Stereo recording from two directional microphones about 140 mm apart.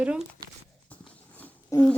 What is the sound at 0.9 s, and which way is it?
Clip-clop, 10° left (ahead or behind).